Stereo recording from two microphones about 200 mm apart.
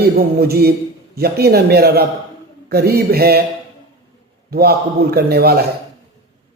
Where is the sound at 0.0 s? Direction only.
50° right (ahead or behind).